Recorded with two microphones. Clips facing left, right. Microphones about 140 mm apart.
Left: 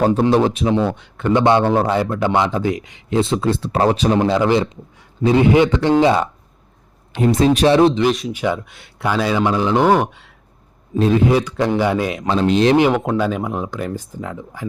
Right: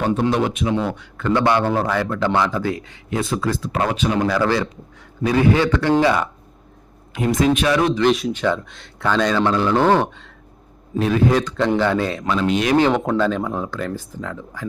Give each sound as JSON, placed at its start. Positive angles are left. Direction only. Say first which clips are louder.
{"t": 0.0, "sound": "a man's voice", "louder": "left 4 dB", "side_deg": 35}
{"t": 8.0, "sound": "speech", "louder": "right 1 dB", "side_deg": 0}
{"t": 8.3, "sound": "a man's voice", "louder": "even", "side_deg": 10}
{"t": 10.9, "sound": "a man's voice", "louder": "left 4 dB", "side_deg": 25}
{"t": 11.3, "sound": "a man's voice", "louder": "left 1 dB", "side_deg": 10}
{"t": 12.3, "sound": "speech", "louder": "left 5 dB", "side_deg": 30}
{"t": 12.7, "sound": "a man's voice", "louder": "left 1 dB", "side_deg": 10}